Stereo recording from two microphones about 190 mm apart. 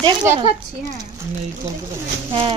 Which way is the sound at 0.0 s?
20° right (ahead or behind).